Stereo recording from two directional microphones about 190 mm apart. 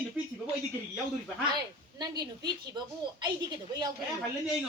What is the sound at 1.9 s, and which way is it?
Speech, 20° right (ahead or behind).